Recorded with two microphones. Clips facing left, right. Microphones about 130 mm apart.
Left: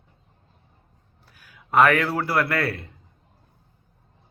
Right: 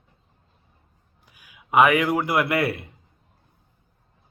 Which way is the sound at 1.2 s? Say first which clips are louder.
Right 1 dB; 10° right (ahead or behind).